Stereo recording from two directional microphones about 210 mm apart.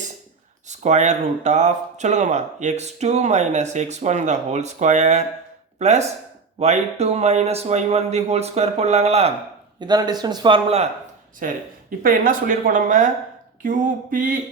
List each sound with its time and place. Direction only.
0.7 s speech: 35° right (ahead or behind)
9.8 s speech: 20° right (ahead or behind)
11.3 s speech: 40° right (ahead or behind)